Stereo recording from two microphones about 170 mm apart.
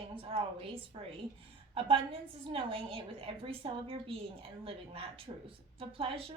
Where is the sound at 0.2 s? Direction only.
30° right (ahead or behind).